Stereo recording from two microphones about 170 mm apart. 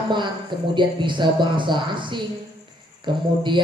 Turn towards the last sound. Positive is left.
turn(degrees=-25)  # may be behind; listen again after turning